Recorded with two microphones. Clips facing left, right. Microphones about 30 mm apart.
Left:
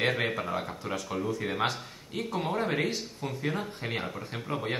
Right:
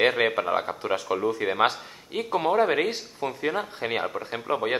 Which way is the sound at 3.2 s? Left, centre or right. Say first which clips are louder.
Right 9 dB; right.